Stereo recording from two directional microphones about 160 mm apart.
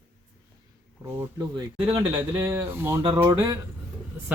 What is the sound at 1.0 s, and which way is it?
Speech, 20° right (ahead or behind).